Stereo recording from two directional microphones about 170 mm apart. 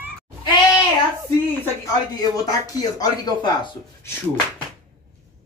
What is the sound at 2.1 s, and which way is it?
Speech, 20° left (ahead or behind).